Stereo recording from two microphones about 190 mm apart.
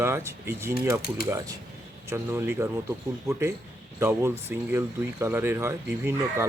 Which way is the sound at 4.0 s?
15° right (ahead or behind).